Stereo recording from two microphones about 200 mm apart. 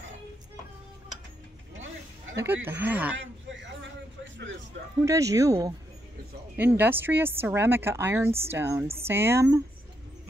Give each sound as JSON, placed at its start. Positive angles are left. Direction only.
{"t": 2.3, "sound": "a woman's voice", "side_deg": -10}
{"t": 5.0, "sound": "a woman's voice", "side_deg": -15}
{"t": 6.7, "sound": "a woman's voice", "side_deg": -10}